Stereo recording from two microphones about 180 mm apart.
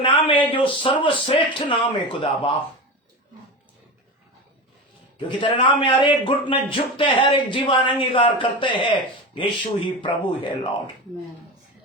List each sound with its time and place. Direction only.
0.0 s speech: 30° left (ahead or behind)
5.4 s speech: 25° left (ahead or behind)